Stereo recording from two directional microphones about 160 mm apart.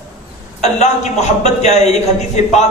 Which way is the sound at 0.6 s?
45° left (ahead or behind).